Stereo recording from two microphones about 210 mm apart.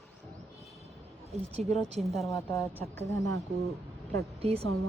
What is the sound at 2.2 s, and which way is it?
Speech, 15° left (ahead or behind).